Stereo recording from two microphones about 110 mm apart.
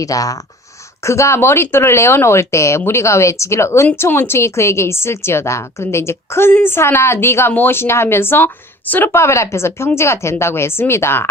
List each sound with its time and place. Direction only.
0.0 s a woman's voice: 30° left (ahead or behind)